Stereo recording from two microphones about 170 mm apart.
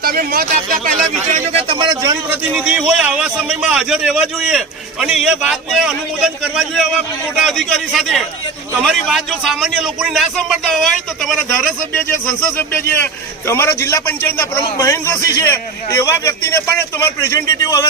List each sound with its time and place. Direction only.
0.0 s speech: 60° right (ahead or behind)
1.5 s a man's voice: 30° right (ahead or behind)
2.5 s a man's voice: 5° right (ahead or behind); by 17.8 s 20° left (ahead or behind)